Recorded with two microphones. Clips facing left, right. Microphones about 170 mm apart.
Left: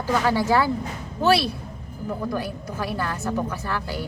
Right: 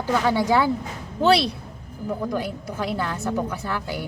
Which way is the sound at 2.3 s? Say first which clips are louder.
Right 1 dB; 20° right (ahead or behind).